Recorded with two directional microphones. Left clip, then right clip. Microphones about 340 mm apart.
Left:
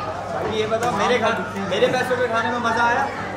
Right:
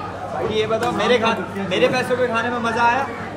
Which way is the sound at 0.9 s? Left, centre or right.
Right.